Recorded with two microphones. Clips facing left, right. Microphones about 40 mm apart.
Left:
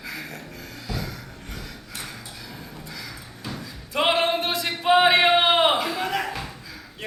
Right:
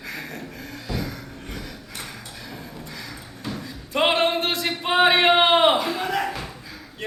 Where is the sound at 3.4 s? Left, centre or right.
Centre.